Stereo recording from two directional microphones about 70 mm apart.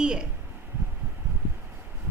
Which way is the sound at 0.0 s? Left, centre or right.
Centre.